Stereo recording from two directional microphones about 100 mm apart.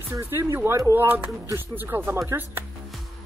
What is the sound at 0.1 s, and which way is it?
Speech, 25° right (ahead or behind).